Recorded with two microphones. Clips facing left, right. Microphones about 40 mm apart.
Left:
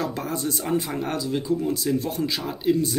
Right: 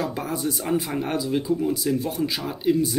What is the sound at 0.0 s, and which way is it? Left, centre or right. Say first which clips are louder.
Speech: right 1 dB; centre.